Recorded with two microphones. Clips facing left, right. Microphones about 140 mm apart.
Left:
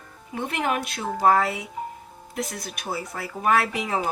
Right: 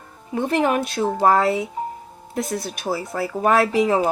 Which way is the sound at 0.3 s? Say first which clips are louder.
Right 7 dB; 30° right (ahead or behind).